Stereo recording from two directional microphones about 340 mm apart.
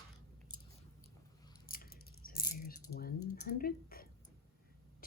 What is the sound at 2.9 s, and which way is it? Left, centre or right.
Typing, left.